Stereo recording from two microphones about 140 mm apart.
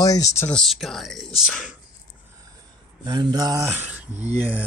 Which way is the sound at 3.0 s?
30° right (ahead or behind).